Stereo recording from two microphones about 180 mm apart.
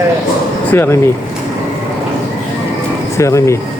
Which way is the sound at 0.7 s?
15° left (ahead or behind).